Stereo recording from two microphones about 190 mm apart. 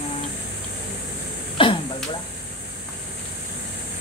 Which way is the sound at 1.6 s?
25° left (ahead or behind).